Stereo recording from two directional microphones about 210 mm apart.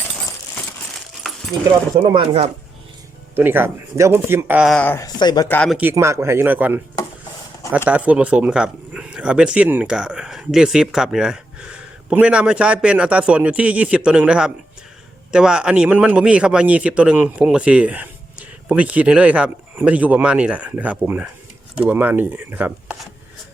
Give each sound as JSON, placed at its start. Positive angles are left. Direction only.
{"t": 1.2, "sound": "dog", "side_deg": 0}
{"t": 2.0, "sound": "speech", "side_deg": -25}
{"t": 3.3, "sound": "a man's voice", "side_deg": -10}
{"t": 5.5, "sound": "speech", "side_deg": 5}
{"t": 5.7, "sound": "a man's voice", "side_deg": -10}
{"t": 7.9, "sound": "a man's voice", "side_deg": -5}